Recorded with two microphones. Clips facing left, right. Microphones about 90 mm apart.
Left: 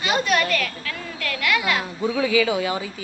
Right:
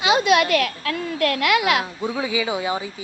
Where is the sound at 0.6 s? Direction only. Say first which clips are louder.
Right 6 dB; 55° right (ahead or behind).